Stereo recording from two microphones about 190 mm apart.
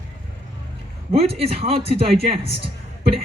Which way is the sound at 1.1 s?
30° right (ahead or behind).